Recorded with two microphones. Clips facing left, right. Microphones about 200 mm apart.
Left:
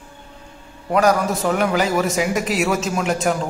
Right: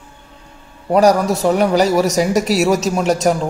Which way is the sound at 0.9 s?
40° right (ahead or behind).